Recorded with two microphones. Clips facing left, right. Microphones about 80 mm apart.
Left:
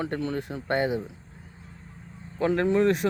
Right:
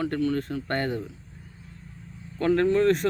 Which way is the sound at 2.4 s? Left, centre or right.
Centre.